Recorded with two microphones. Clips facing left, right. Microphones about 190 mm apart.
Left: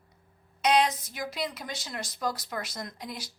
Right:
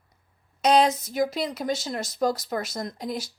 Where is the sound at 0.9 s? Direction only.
45° right (ahead or behind).